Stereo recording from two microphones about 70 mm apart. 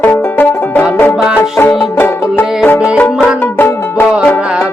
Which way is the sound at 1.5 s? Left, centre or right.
Left.